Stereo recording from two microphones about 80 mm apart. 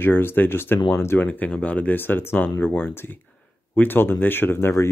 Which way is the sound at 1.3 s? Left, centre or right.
Centre.